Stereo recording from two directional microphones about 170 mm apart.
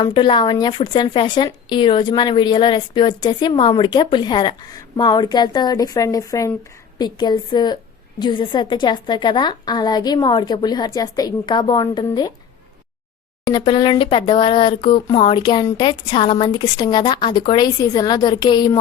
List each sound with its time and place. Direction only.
0.0 s a woman's voice: 25° left (ahead or behind)
13.4 s a woman's voice: 25° left (ahead or behind)